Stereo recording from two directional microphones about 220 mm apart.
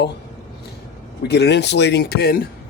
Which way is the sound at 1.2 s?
50° left (ahead or behind).